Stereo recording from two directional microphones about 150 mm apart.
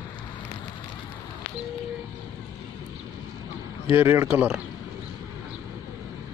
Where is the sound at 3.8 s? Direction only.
15° right (ahead or behind).